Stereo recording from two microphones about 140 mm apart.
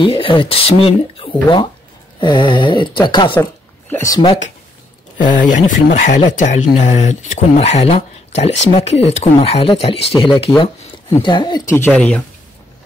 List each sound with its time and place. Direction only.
0.0 s speech: 40° left (ahead or behind)
3.9 s speech: 20° left (ahead or behind)
5.1 s speech: 70° left (ahead or behind); by 11.6 s 30° left (ahead or behind)
11.6 s speech: 15° left (ahead or behind)